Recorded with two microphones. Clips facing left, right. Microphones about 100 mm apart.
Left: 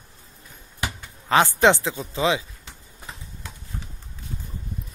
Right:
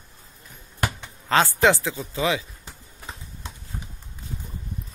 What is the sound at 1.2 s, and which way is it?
A man's voice, 20° left (ahead or behind).